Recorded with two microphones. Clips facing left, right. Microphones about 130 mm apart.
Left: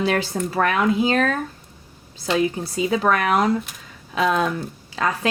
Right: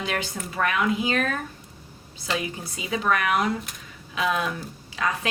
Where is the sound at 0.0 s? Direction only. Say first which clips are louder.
Left 8 dB; 35° left (ahead or behind).